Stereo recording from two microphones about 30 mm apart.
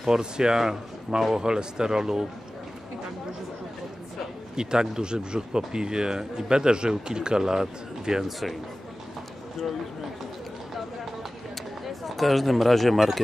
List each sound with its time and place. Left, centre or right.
0.0 s a man's voice: right
4.6 s a man's voice: right
11.8 s speech: centre